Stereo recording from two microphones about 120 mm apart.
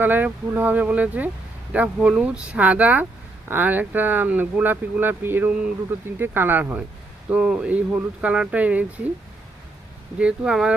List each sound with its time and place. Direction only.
0.0 s speech: 15° right (ahead or behind)
10.2 s speech: 10° right (ahead or behind)